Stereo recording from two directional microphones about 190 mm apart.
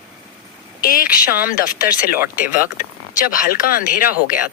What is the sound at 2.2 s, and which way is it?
Speech, 10° right (ahead or behind).